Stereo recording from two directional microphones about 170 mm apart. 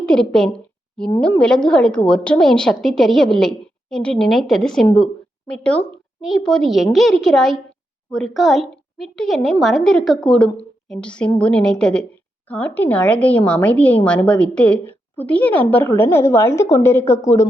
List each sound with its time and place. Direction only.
0.0 s a woman's voice: 5° left (ahead or behind)